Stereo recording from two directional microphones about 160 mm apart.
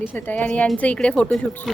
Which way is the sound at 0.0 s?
10° left (ahead or behind).